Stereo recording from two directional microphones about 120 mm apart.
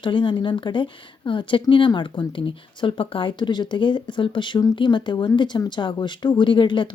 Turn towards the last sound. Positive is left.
turn(degrees=40)  # may be behind; listen again after turning